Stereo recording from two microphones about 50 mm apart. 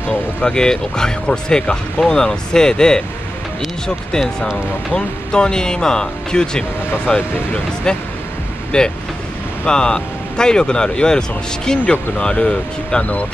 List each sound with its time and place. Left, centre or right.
0.5 s speech: centre
4.9 s speech: centre
8.7 s speech: centre